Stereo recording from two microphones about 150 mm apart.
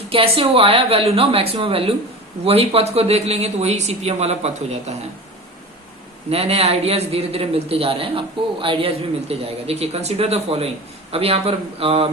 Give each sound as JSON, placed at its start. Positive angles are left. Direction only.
{"t": 0.1, "sound": "a man's voice", "side_deg": -40}
{"t": 6.3, "sound": "a man's voice", "side_deg": -45}